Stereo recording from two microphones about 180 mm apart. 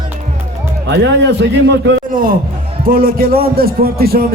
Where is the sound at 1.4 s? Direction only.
70° right (ahead or behind).